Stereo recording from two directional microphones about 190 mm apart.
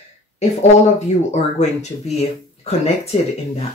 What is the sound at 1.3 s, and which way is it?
Speech, 35° left (ahead or behind).